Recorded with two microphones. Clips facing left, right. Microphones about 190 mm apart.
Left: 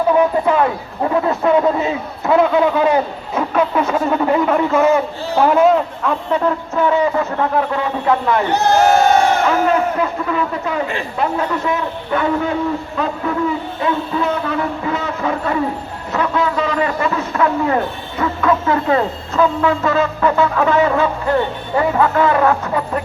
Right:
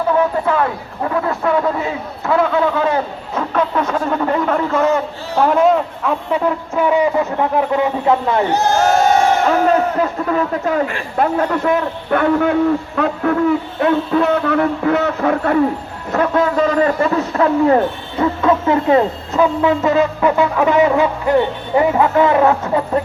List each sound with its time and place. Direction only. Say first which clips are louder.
0.1 s a sound: left 1 dB; 15° left (ahead or behind)
1.1 s a man's voice: left 3 dB; 20° left (ahead or behind); by 8.4 s 25° right (ahead or behind)
8.5 s speech: left 4 dB; 60° left (ahead or behind)
9.6 s a man's voice: right 1 dB; 40° right (ahead or behind); by 15.5 s 60° right (ahead or behind)
16.1 s a man's voice: right 3 dB; 45° right (ahead or behind)
18.2 s a sound: right 2 dB; 25° right (ahead or behind)